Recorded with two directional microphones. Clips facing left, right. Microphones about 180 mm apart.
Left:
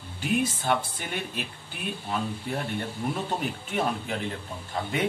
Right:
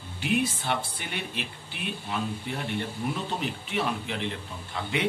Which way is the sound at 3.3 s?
45° left (ahead or behind).